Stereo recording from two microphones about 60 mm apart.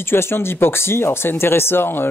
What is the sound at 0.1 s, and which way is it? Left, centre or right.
Speech, left.